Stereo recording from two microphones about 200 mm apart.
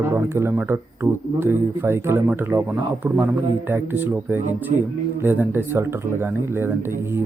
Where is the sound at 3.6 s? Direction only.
10° right (ahead or behind).